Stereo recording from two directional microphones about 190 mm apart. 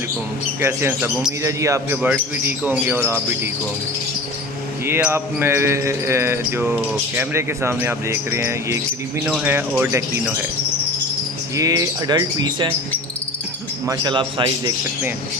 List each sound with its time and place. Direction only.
0.6 s speech: 15° right (ahead or behind)
4.9 s speech: 10° right (ahead or behind)
11.5 s speech: 15° right (ahead or behind)
13.8 s speech: 20° right (ahead or behind)